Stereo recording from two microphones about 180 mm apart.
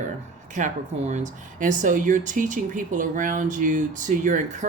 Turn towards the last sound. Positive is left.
turn(degrees=-45)  # may be behind; listen again after turning